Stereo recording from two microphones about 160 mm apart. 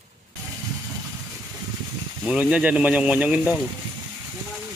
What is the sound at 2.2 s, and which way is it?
Speech, 5° right (ahead or behind).